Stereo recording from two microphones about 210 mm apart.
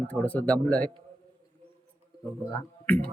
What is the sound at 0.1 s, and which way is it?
Speech, 5° left (ahead or behind).